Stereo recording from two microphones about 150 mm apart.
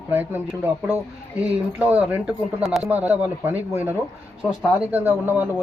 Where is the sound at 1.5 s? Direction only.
10° right (ahead or behind).